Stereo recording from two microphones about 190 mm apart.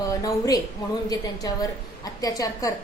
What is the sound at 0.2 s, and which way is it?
A woman's voice, 20° left (ahead or behind).